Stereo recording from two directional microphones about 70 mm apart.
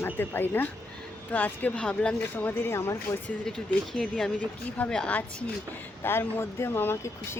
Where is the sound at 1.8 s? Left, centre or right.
Centre.